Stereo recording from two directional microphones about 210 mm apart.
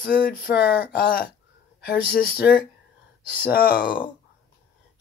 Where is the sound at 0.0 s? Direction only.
45° left (ahead or behind).